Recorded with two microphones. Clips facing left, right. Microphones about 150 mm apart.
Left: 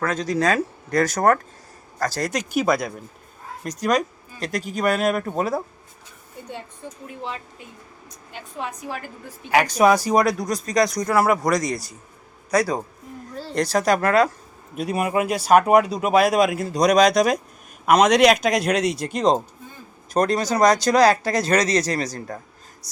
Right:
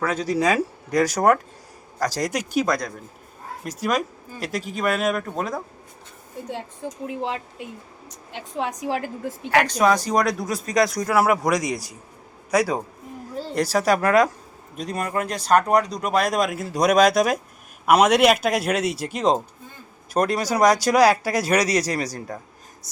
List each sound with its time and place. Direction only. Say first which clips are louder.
0.0 s speech: even; 10° right (ahead or behind)
2.5 s speech: left 4 dB; 5° left (ahead or behind)
6.5 s a woman's voice: right 4 dB; 90° right
9.5 s speech: left 2 dB; 10° left (ahead or behind); by 14.3 s 10° right (ahead or behind)
14.8 s speech: left 4 dB; 10° left (ahead or behind); by 22.4 s 10° right (ahead or behind)